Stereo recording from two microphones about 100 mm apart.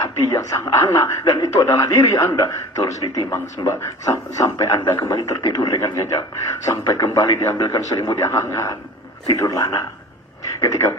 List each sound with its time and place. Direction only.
0.0 s speech: 30° left (ahead or behind)